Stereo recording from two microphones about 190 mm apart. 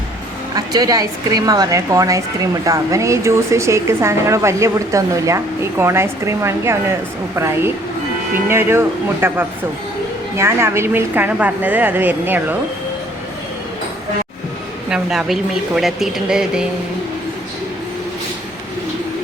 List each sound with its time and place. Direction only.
0.5 s a woman's voice: 20° right (ahead or behind)
14.8 s speech: 5° right (ahead or behind)